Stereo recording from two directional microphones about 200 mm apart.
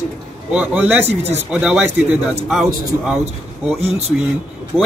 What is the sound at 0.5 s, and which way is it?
A man's voice, 5° right (ahead or behind).